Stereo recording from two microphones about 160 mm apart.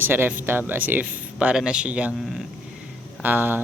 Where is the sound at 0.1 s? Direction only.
15° right (ahead or behind).